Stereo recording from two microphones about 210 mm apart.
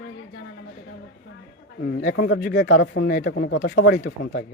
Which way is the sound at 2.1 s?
55° left (ahead or behind).